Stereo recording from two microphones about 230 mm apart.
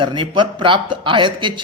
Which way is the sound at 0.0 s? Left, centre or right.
Right.